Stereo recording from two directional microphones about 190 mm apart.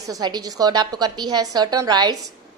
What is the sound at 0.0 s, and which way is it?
Speech, 20° right (ahead or behind).